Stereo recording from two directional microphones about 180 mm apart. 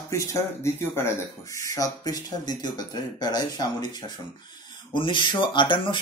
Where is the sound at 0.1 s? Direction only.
15° left (ahead or behind).